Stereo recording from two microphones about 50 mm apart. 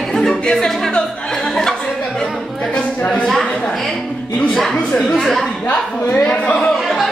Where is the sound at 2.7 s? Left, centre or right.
Left.